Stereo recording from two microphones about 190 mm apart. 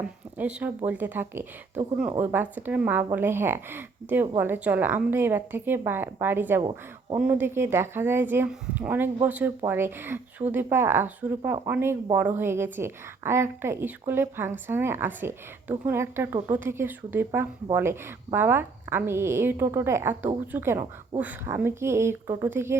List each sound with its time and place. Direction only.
0.3 s a woman's voice: 10° right (ahead or behind)
6.6 s speech: 25° right (ahead or behind)
7.2 s a woman's voice: 10° right (ahead or behind)